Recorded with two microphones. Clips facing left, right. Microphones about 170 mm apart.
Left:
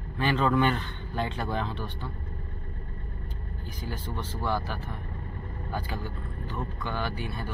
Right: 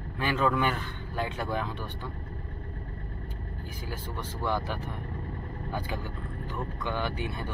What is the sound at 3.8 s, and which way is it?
Speech, 10° right (ahead or behind).